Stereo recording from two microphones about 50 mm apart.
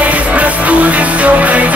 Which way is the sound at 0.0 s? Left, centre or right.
Right.